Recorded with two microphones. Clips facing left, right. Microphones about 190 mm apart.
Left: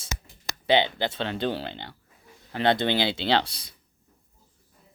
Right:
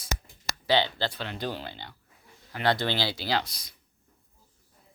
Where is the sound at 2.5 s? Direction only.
25° left (ahead or behind).